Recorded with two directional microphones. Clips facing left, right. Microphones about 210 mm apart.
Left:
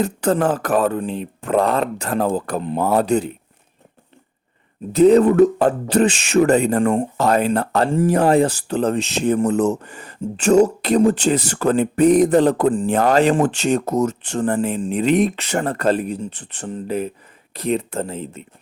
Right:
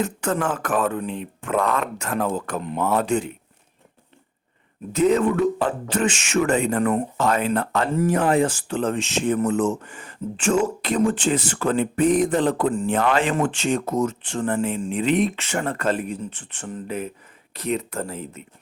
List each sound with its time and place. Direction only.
0.0 s speech: 35° left (ahead or behind)
4.9 s speech: 35° left (ahead or behind)